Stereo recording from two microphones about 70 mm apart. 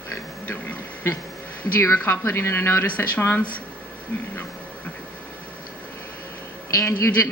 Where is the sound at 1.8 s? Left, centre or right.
Left.